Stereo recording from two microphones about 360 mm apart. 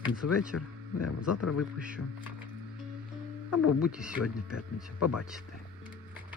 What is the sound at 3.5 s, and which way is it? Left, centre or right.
Speech, left.